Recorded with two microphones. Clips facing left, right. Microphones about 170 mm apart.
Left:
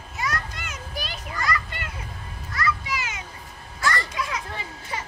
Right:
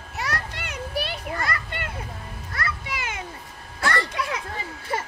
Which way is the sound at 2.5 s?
55° right (ahead or behind).